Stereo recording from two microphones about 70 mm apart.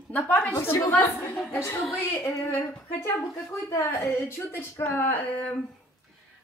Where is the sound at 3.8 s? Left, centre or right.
Left.